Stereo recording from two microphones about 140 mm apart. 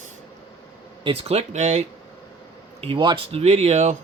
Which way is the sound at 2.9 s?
35° right (ahead or behind).